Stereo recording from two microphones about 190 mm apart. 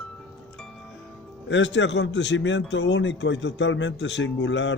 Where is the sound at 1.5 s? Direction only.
70° left (ahead or behind).